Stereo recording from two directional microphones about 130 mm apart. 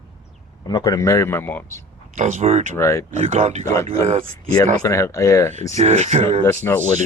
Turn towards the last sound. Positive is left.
turn(degrees=20)  # may be behind; listen again after turning